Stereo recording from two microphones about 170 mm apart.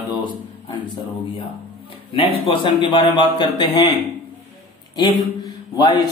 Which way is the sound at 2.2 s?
30° left (ahead or behind).